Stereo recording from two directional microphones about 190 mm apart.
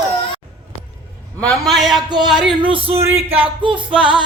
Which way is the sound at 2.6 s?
30° right (ahead or behind).